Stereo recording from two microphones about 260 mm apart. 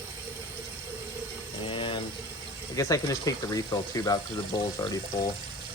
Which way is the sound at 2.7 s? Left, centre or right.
Centre.